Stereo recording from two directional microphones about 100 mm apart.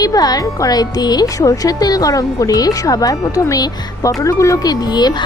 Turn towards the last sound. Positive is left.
turn(degrees=45)  # may be behind; listen again after turning